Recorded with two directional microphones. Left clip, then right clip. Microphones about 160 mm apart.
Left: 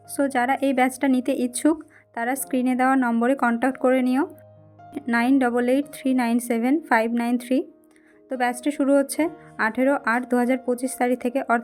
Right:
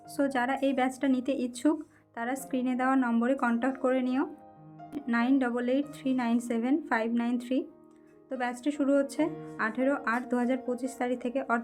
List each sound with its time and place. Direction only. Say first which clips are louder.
0.2 s speech: left 7 dB; 25° left (ahead or behind)